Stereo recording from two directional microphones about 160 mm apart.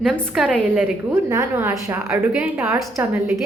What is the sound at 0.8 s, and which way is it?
A woman's voice, 15° right (ahead or behind).